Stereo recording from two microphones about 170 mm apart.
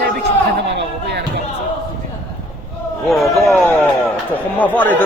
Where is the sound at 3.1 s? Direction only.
Centre (ahead or behind).